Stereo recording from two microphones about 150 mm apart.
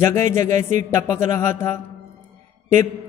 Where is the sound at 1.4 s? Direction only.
15° left (ahead or behind).